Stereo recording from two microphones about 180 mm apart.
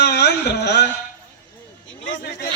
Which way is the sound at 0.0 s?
65° left (ahead or behind).